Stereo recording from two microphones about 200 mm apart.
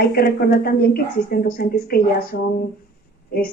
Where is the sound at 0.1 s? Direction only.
50° left (ahead or behind).